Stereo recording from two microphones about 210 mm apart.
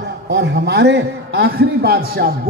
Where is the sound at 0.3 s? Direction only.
55° right (ahead or behind).